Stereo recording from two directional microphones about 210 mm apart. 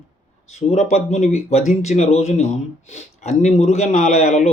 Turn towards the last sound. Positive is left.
turn(degrees=35)  # may be behind; listen again after turning